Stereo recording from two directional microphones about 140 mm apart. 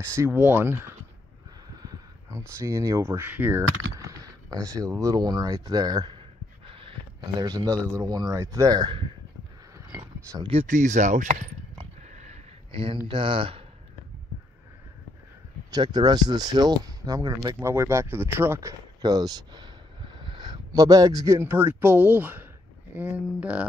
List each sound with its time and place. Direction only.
0.1 s speech: 15° right (ahead or behind)
4.2 s speech: 25° right (ahead or behind)
7.3 s speech: 30° right (ahead or behind)
9.8 s a sound: 30° right (ahead or behind)
10.7 s speech: 60° right (ahead or behind)
13.1 s speech: 35° right (ahead or behind)
15.7 s speech: 30° right (ahead or behind); by 23.7 s 10° right (ahead or behind)